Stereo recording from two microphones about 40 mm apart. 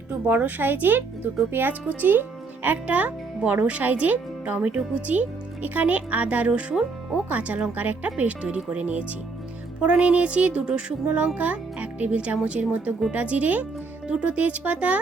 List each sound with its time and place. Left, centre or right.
0.1 s a woman's voice: right
2.8 s speech: right
4.7 s a woman's voice: right
6.5 s a woman's voice: right
8.4 s speech: right
8.7 s speech: right
11.0 s speech: right